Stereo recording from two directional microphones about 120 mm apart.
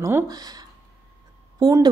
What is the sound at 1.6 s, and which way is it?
Speech, 30° right (ahead or behind).